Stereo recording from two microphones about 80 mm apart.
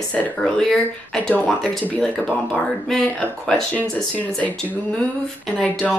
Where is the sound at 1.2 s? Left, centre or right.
Centre.